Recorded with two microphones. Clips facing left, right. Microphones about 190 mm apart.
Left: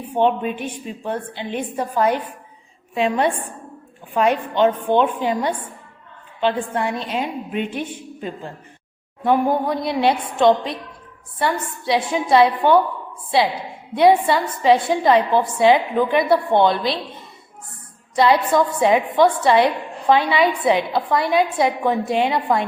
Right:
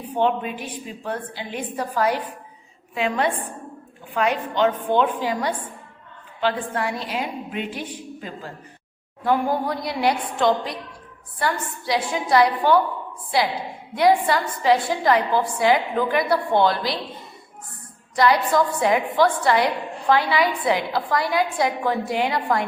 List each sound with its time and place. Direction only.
0.1 s a woman's voice: 25° left (ahead or behind)
4.5 s a woman's voice: 20° left (ahead or behind)
13.9 s a woman's voice: 25° left (ahead or behind)
18.2 s a woman's voice: 25° left (ahead or behind)